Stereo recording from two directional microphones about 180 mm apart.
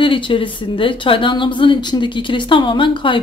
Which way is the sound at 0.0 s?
30° left (ahead or behind).